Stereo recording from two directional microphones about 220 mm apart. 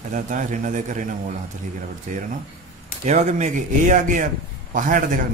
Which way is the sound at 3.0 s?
30° right (ahead or behind).